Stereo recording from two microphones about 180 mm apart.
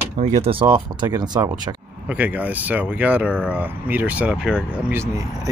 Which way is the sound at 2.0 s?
10° right (ahead or behind).